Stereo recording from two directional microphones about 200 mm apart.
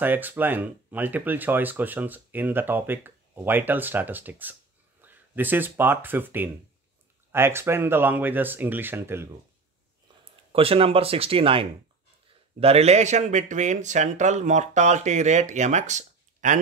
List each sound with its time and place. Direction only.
0.0 s speech: 10° right (ahead or behind)
10.5 s speech: 30° right (ahead or behind)